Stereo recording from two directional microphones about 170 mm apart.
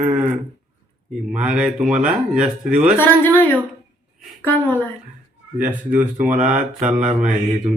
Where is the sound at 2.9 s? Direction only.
10° left (ahead or behind).